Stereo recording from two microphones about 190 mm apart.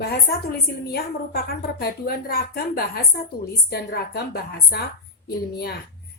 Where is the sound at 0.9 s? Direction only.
55° left (ahead or behind).